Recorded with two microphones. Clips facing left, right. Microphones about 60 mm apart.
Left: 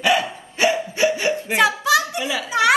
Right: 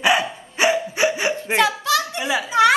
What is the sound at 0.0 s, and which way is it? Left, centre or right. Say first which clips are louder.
Dog: even; right.